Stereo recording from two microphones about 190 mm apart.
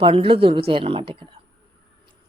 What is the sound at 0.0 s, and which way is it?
A woman's voice, 30° right (ahead or behind).